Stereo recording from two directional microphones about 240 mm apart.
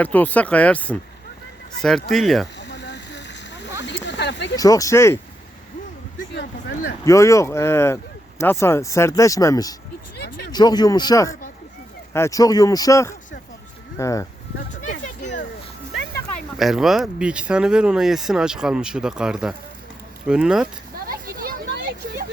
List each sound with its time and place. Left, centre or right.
0.0 s speech: centre
2.0 s speech: centre
2.6 s a sound: left
4.0 s speech: left
4.5 s speech: centre
6.3 s speech: left
7.0 s speech: centre
10.2 s a sound: left
10.5 s speech: centre
14.7 s a sound: left
16.6 s speech: centre
20.9 s a sound: right